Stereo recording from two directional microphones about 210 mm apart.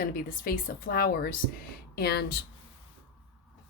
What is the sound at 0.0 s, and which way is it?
A woman's voice, 40° left (ahead or behind).